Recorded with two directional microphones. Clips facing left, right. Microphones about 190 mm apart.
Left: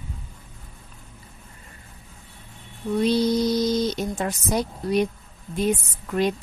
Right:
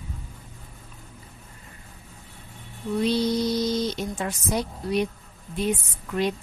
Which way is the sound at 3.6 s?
45° left (ahead or behind).